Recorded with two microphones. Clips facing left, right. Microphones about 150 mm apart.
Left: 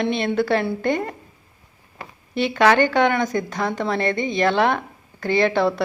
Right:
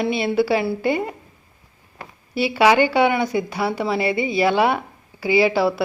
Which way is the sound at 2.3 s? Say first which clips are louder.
Right 1 dB; 10° right (ahead or behind).